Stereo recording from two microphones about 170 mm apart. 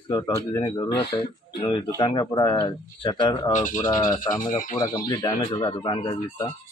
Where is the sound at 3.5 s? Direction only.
50° left (ahead or behind).